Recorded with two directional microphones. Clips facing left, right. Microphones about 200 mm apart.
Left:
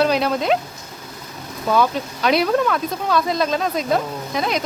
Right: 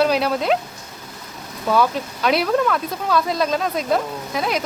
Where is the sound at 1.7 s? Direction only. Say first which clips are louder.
Even; centre (ahead or behind).